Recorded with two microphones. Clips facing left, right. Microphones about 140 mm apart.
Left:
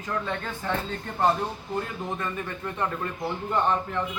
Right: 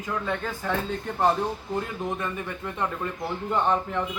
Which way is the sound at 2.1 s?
15° right (ahead or behind).